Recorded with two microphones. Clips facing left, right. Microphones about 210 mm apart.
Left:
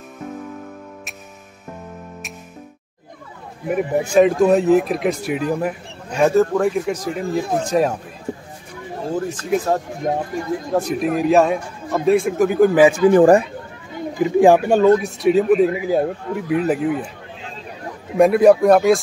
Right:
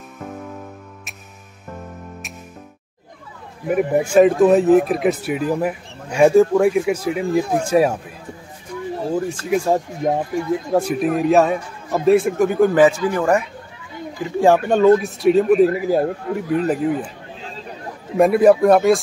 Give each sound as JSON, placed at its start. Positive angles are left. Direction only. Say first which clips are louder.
{"t": 3.7, "sound": "speech", "louder": "right 1 dB", "side_deg": -5}
{"t": 9.1, "sound": "speech", "louder": "even", "side_deg": -10}
{"t": 13.2, "sound": "speech", "louder": "left 5 dB", "side_deg": 35}
{"t": 14.1, "sound": "speech", "louder": "left 3 dB", "side_deg": 15}
{"t": 18.1, "sound": "speech", "louder": "left 1 dB", "side_deg": 0}